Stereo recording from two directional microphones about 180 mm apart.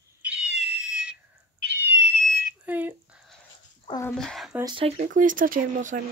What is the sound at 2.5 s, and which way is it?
Smoke detector, 10° right (ahead or behind).